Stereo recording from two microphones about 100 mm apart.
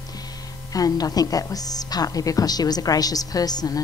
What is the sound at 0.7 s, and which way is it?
A woman's voice, 40° left (ahead or behind).